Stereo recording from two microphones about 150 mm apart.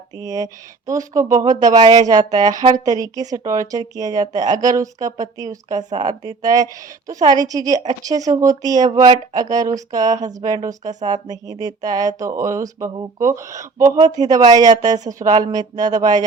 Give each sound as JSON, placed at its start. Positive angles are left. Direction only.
{"t": 0.2, "sound": "speech", "side_deg": -25}